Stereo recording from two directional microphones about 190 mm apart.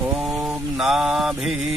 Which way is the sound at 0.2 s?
Centre (ahead or behind).